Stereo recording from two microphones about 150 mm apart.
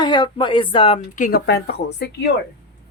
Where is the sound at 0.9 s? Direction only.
60° left (ahead or behind); by 2.3 s 90° left.